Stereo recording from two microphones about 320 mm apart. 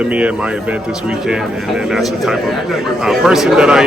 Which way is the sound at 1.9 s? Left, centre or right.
Centre.